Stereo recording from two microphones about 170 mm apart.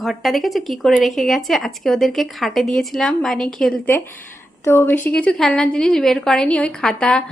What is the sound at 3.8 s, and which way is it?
A woman's voice, 15° left (ahead or behind).